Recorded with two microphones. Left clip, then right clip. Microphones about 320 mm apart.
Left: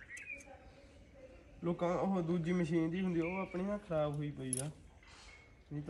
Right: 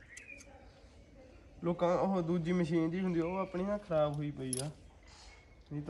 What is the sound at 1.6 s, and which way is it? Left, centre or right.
A man's voice, centre.